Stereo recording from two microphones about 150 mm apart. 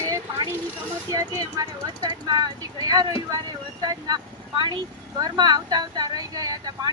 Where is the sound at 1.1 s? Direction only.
25° right (ahead or behind).